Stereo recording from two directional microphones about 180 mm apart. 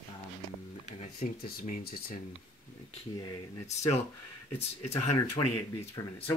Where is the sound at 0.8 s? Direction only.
40° left (ahead or behind).